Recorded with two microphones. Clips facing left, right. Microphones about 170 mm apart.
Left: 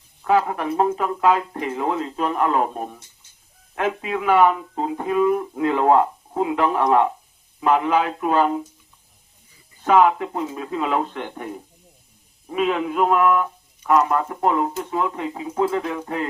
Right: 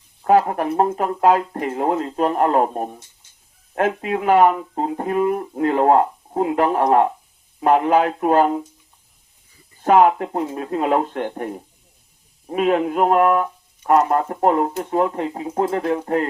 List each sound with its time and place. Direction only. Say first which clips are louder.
0.3 s speech: right 3 dB; 40° right (ahead or behind)
9.8 s speech: right 2 dB; 45° right (ahead or behind)
12.5 s speech: right 3 dB; 45° right (ahead or behind)